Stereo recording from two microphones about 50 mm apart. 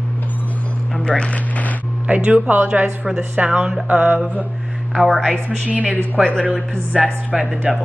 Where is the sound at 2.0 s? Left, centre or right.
Right.